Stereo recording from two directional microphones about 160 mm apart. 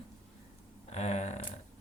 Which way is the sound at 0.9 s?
45° left (ahead or behind).